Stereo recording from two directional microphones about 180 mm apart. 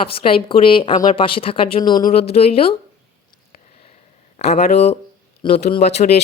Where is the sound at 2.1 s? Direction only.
35° left (ahead or behind).